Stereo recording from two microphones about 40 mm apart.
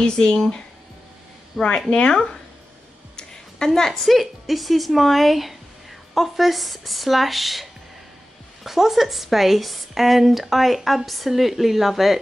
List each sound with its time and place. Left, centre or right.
0.0 s speech: centre
1.6 s a woman's voice: centre
1.9 s a woman's voice: left; by 7.6 s centre
8.6 s a woman's voice: centre